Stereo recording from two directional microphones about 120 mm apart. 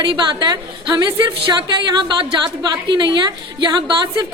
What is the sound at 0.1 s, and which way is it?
A woman's voice, 40° right (ahead or behind).